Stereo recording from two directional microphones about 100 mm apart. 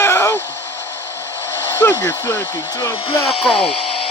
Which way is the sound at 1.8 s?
20° left (ahead or behind).